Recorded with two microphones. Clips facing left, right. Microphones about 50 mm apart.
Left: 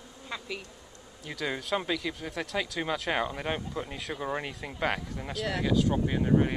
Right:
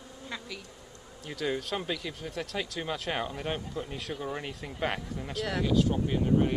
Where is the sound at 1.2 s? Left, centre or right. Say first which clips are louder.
Right 1 dB; centre.